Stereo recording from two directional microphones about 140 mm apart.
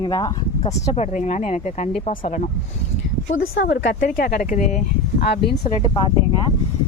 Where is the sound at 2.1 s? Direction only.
75° left (ahead or behind).